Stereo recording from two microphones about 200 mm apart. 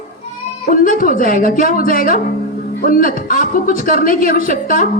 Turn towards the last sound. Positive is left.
turn(degrees=45)  # may be behind; listen again after turning